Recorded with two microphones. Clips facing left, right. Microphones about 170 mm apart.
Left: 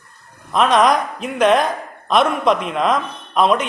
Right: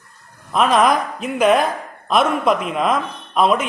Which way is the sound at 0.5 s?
5° right (ahead or behind).